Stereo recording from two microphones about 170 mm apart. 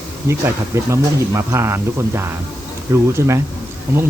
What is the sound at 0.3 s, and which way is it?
Speech, 15° right (ahead or behind).